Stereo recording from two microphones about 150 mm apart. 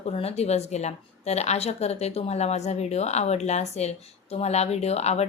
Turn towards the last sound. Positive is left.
turn(degrees=45)  # may be behind; listen again after turning